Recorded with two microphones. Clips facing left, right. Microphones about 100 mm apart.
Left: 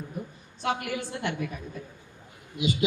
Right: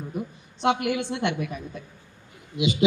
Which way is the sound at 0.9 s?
80° right.